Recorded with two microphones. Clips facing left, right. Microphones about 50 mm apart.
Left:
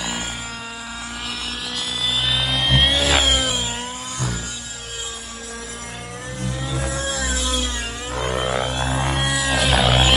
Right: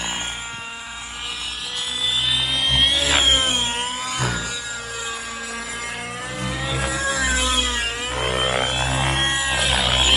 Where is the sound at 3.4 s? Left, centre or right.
Right.